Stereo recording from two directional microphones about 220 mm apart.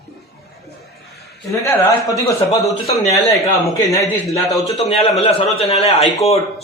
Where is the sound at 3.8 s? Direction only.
15° left (ahead or behind).